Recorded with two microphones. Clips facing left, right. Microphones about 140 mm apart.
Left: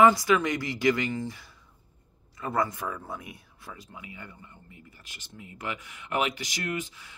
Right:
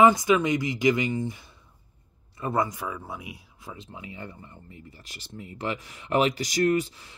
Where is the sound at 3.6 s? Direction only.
20° right (ahead or behind).